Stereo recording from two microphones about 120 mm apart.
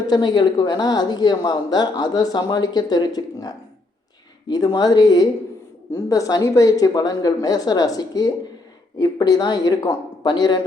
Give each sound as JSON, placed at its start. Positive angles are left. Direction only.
{"t": 0.1, "sound": "speech", "side_deg": 35}